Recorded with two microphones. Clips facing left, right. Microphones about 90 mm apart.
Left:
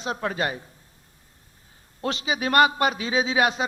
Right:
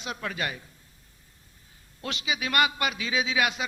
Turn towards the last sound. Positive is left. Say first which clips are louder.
# left 4 dB
turn(degrees=35)  # may be behind; listen again after turning